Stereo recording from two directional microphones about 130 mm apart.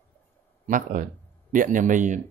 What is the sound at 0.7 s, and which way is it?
A man's voice, 90° right.